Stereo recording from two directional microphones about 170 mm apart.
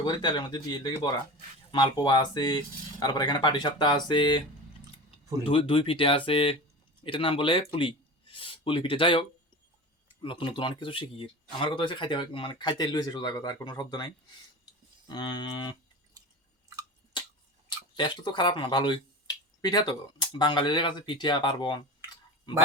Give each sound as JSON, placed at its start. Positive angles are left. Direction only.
{"t": 0.0, "sound": "speech", "side_deg": 25}
{"t": 17.7, "sound": "speech", "side_deg": 25}